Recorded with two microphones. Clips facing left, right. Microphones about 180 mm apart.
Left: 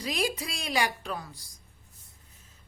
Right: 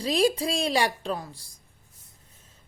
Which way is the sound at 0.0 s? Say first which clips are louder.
Right 8 dB; 30° right (ahead or behind).